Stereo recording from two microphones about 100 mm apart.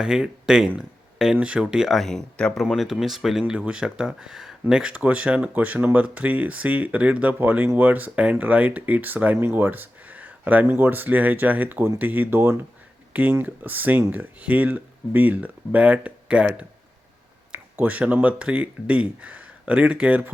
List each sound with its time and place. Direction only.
0.0 s speech: 5° right (ahead or behind)